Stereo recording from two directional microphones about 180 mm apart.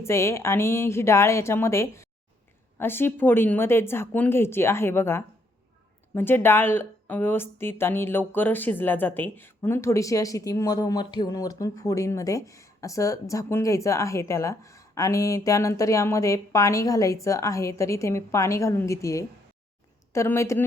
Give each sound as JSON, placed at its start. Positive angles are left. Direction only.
{"t": 0.0, "sound": "speech", "side_deg": 15}